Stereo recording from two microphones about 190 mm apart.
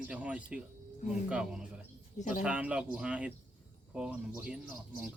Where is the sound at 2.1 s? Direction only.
40° left (ahead or behind).